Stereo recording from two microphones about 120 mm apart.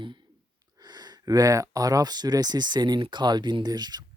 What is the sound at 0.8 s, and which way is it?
Speech, 35° right (ahead or behind).